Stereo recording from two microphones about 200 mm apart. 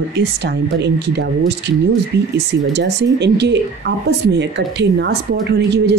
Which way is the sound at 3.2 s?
60° right (ahead or behind).